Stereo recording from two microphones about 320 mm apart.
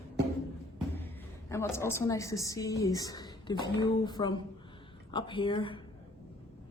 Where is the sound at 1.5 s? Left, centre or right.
Centre.